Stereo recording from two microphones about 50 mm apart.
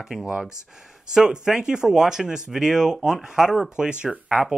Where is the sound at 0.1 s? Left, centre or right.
Centre.